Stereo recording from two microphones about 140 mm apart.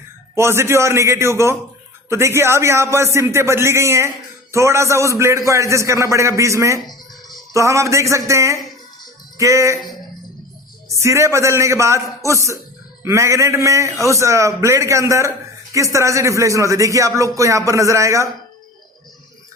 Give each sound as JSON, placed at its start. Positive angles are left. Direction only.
{"t": 0.3, "sound": "a man's voice", "side_deg": -20}
{"t": 10.9, "sound": "a man's voice", "side_deg": -20}